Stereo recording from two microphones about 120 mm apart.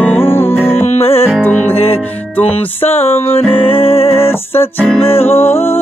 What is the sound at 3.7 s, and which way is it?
Music, 55° left (ahead or behind).